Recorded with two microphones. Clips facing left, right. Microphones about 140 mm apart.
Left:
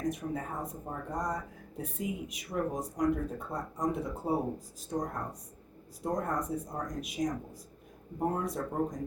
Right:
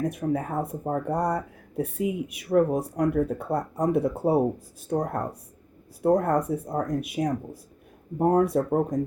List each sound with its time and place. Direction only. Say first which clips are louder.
0.0 s speech: right 7 dB; 65° right (ahead or behind)